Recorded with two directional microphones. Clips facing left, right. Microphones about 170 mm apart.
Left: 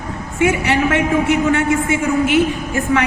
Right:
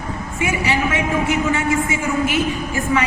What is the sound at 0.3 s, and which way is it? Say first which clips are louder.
A man's voice: left 5 dB; 65° left (ahead or behind).